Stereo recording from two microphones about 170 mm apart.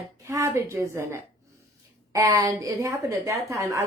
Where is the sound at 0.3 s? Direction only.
15° right (ahead or behind).